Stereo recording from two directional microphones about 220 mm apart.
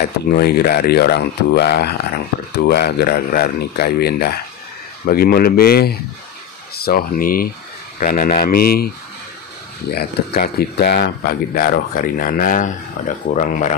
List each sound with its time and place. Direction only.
0.0 s speech: 45° left (ahead or behind)
9.8 s speech: 45° left (ahead or behind)